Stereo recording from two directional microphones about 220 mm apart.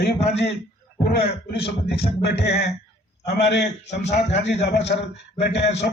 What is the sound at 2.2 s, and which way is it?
A man's voice, 50° left (ahead or behind).